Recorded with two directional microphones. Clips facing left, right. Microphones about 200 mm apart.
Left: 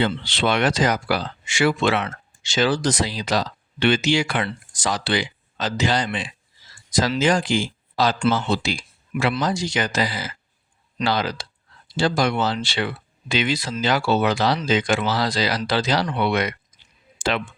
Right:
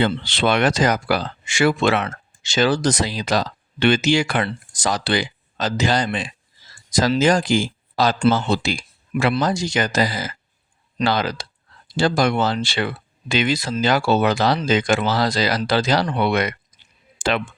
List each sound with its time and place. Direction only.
0.0 s speech: 50° right (ahead or behind)